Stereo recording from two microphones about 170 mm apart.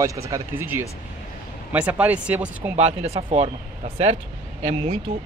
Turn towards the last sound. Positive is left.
turn(degrees=-40)  # may be behind; listen again after turning